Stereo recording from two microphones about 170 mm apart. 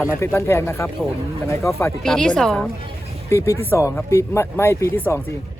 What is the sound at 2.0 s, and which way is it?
Speech, 5° left (ahead or behind).